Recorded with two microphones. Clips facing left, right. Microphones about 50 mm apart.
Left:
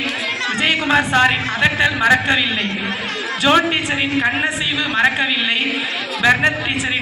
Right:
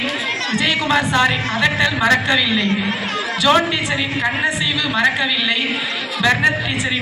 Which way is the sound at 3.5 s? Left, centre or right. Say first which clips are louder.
Even; left.